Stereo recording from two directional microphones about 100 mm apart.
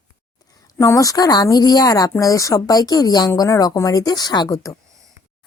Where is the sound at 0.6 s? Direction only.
30° left (ahead or behind).